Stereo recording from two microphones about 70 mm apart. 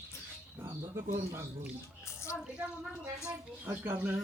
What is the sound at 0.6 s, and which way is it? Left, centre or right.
Pigeon, right.